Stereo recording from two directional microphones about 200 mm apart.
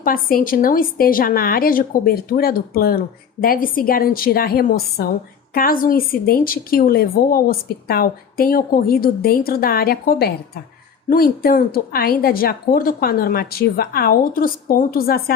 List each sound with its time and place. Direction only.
0.0 s a woman's voice: 45° left (ahead or behind)